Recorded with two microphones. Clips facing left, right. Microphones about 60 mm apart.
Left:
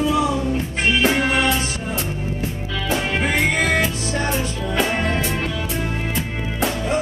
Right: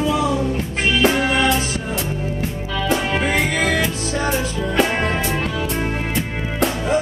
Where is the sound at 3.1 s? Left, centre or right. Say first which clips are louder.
Right 2 dB; centre.